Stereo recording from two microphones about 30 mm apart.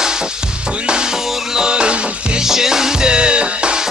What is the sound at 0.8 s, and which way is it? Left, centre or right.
Music, right.